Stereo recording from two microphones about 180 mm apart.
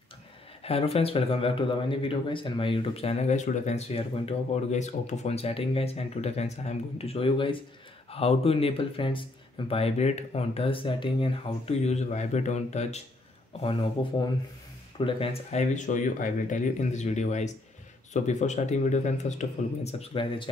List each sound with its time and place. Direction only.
0.7 s speech: 35° left (ahead or behind)